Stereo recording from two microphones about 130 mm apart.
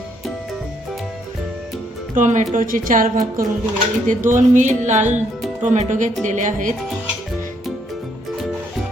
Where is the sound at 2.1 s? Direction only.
75° right (ahead or behind).